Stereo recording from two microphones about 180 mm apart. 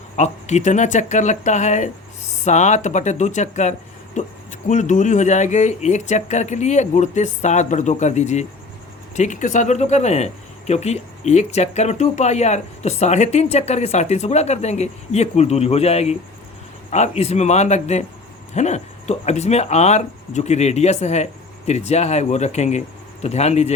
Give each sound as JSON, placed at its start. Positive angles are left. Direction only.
{"t": 0.2, "sound": "speech", "side_deg": 40}